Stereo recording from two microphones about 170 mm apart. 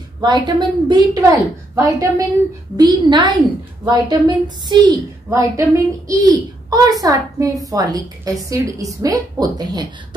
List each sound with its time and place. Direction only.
0.2 s a woman's voice: 25° right (ahead or behind)